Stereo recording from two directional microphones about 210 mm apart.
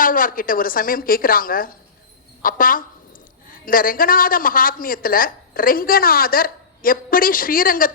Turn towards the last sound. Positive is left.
turn(degrees=40)  # may be behind; listen again after turning